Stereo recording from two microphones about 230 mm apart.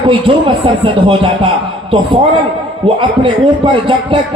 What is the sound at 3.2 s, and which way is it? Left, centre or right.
A man's voice, right.